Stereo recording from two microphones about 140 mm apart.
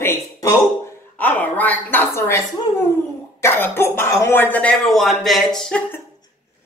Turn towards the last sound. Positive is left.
turn(degrees=5)  # may be behind; listen again after turning